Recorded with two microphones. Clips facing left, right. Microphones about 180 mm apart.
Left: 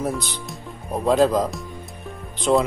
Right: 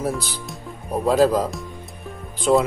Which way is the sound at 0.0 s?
5° right (ahead or behind).